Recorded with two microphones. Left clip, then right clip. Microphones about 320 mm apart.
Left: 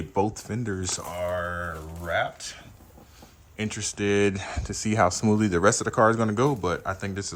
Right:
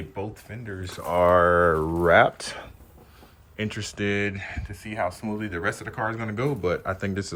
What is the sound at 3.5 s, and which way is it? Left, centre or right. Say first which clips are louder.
Speech: even; centre.